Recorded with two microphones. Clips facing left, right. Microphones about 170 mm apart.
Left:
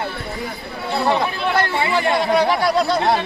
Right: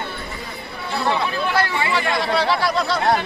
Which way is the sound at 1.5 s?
45° left (ahead or behind).